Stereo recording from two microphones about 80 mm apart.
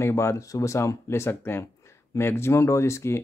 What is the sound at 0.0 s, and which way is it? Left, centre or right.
Speech, left.